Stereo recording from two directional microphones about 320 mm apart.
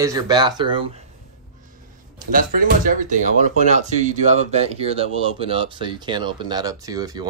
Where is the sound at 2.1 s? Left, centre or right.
Right.